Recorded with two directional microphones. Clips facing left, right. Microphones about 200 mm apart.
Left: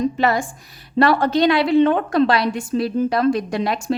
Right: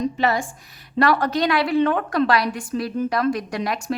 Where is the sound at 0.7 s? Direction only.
30° left (ahead or behind).